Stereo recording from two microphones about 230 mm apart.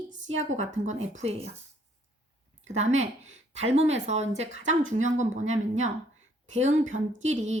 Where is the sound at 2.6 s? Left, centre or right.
Right.